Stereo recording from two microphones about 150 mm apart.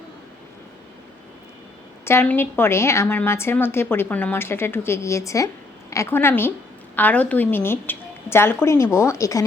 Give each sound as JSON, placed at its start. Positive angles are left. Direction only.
{"t": 2.0, "sound": "a woman's voice", "side_deg": 15}